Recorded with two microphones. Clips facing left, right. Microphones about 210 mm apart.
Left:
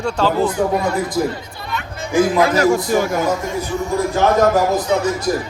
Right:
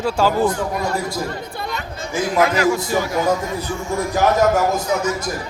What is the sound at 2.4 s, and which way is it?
Speech, 45° left (ahead or behind).